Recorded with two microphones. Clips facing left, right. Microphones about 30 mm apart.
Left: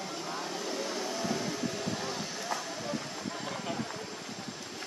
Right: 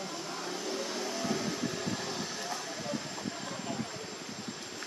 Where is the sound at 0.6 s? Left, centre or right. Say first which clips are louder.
Even; centre.